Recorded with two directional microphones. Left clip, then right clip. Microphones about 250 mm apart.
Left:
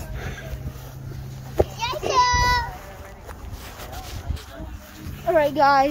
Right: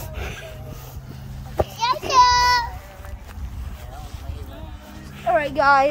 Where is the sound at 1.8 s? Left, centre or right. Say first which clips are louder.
Right 6 dB; right.